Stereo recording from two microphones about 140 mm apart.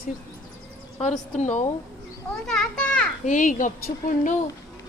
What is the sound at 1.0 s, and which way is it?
Speech, 55° left (ahead or behind).